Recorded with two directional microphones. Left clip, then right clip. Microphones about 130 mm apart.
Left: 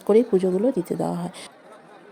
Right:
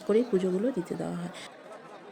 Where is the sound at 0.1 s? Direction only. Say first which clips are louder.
Left 7 dB; 30° left (ahead or behind).